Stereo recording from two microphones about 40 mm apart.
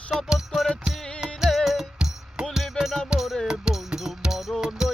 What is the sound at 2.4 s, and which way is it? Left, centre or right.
Music, right.